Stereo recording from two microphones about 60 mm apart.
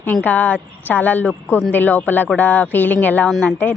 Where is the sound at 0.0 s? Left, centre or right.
Left.